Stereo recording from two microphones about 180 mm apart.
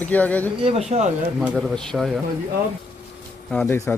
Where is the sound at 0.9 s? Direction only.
35° right (ahead or behind).